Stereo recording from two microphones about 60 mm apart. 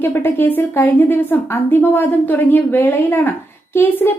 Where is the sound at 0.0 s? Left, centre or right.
Left.